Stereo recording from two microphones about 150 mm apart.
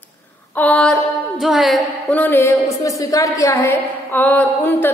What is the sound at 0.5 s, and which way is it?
A woman's voice, 10° left (ahead or behind).